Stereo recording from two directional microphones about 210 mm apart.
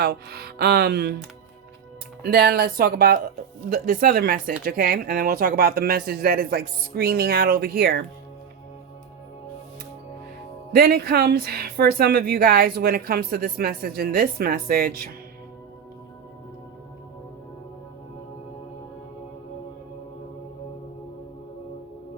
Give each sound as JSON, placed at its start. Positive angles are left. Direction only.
{"t": 0.0, "sound": "speech", "side_deg": -50}
{"t": 2.2, "sound": "speech", "side_deg": -50}
{"t": 10.7, "sound": "speech", "side_deg": -45}